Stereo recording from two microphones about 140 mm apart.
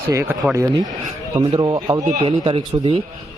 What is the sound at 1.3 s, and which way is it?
A man's voice, 30° right (ahead or behind).